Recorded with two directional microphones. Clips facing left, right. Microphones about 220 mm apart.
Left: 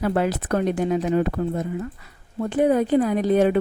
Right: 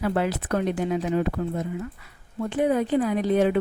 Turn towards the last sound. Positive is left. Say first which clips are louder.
# left 3 dB
turn(degrees=45)  # may be behind; listen again after turning